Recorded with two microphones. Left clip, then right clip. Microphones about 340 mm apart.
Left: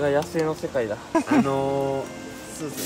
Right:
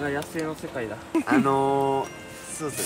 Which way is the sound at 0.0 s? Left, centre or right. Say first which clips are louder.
Left 6 dB; left.